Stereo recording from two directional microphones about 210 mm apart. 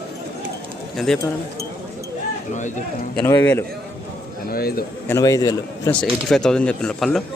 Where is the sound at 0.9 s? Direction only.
Centre (ahead or behind).